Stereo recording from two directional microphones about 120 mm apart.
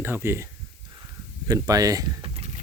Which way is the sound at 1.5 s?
30° right (ahead or behind).